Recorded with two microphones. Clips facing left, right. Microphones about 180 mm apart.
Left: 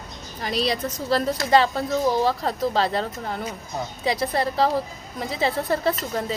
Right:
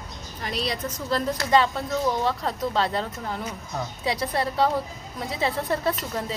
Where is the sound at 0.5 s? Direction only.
35° left (ahead or behind).